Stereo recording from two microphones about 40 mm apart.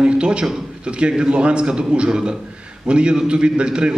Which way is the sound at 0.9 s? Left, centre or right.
Right.